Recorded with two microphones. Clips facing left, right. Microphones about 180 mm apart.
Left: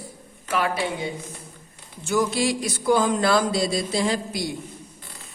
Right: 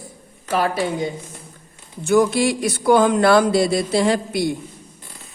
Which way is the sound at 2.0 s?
55° right (ahead or behind).